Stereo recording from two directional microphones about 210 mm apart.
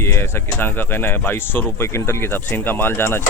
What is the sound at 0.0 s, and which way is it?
Speech, 10° left (ahead or behind).